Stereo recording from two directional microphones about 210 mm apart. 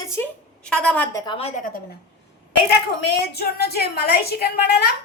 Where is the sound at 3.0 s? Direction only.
50° left (ahead or behind).